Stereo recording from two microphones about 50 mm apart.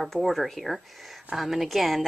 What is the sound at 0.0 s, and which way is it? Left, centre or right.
Speech, centre.